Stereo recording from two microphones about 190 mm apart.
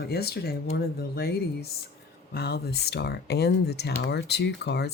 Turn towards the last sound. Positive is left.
turn(degrees=60)  # may be behind; listen again after turning